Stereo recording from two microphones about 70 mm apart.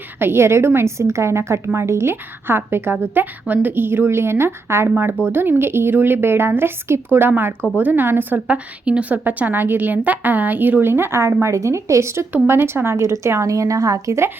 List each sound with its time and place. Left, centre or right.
0.2 s a woman's voice: right